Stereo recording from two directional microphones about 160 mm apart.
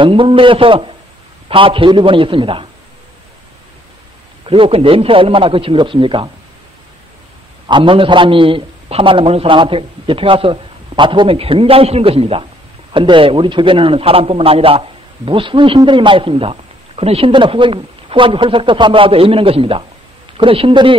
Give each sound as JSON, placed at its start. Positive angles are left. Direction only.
{"t": 0.0, "sound": "a man's voice", "side_deg": -35}
{"t": 4.5, "sound": "a man's voice", "side_deg": -35}
{"t": 7.6, "sound": "a man's voice", "side_deg": -30}